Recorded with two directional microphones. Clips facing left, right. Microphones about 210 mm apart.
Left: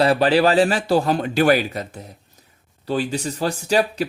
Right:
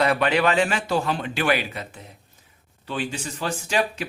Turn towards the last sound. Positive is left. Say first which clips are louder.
# left 5 dB
turn(degrees=35)  # may be behind; listen again after turning